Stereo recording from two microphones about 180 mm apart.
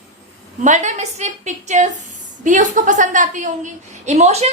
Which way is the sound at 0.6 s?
45° right (ahead or behind).